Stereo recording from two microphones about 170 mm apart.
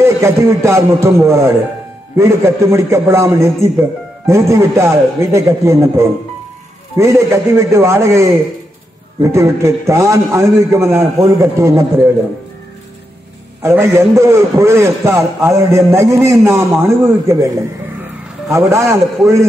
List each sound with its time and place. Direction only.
0.0 s a man's voice: 15° right (ahead or behind)
13.6 s a man's voice: 15° right (ahead or behind)